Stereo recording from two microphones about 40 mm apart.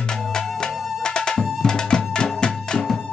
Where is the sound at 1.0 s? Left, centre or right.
Centre.